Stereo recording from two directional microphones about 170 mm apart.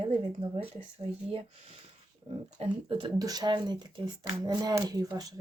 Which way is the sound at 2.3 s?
35° right (ahead or behind).